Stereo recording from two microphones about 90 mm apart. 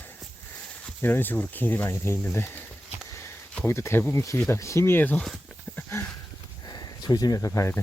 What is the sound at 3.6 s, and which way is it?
Speech, 30° left (ahead or behind).